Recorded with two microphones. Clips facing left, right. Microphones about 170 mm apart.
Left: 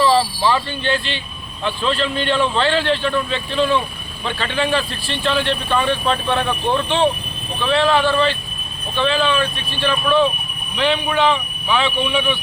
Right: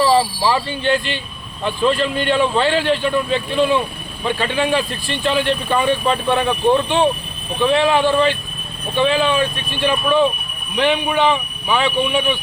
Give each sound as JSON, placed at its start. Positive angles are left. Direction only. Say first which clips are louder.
{"t": 0.0, "sound": "speech", "louder": "right 1 dB", "side_deg": -10}